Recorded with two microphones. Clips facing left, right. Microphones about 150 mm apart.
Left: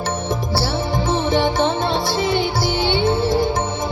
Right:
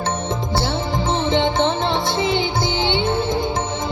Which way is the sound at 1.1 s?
20° right (ahead or behind).